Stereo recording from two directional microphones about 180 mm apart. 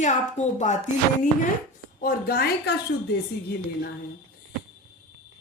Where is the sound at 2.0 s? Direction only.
55° left (ahead or behind).